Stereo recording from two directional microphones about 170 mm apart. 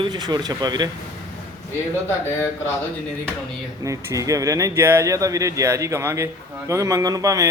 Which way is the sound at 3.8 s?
20° right (ahead or behind).